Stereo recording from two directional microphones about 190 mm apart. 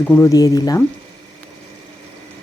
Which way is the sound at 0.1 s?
15° left (ahead or behind).